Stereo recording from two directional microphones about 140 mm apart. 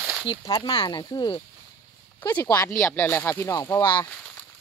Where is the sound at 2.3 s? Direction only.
20° left (ahead or behind).